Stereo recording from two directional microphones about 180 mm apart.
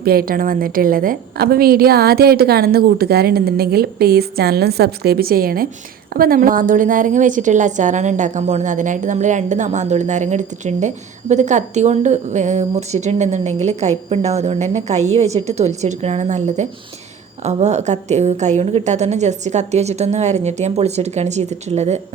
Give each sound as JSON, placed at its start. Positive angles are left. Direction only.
{"t": 0.0, "sound": "a woman's voice", "side_deg": -55}